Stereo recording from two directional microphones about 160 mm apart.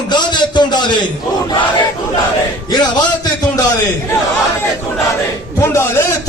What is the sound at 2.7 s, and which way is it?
Speech, 25° left (ahead or behind).